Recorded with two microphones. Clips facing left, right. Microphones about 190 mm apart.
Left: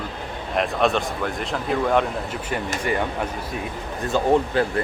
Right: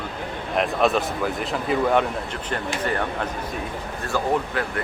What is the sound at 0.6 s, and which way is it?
Speech, centre (ahead or behind).